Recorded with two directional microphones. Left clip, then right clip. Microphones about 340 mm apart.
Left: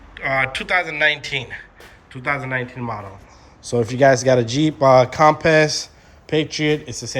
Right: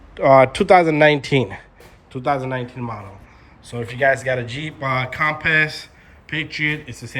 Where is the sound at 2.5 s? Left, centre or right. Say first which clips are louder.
Left 2 dB; centre.